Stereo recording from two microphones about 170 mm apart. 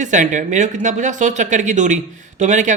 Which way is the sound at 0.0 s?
45° right (ahead or behind).